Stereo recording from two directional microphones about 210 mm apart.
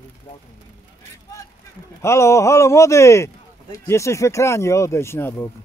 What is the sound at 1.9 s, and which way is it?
Speech, 15° left (ahead or behind).